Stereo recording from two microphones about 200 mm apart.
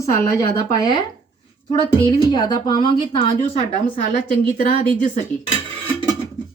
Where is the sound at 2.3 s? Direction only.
20° left (ahead or behind).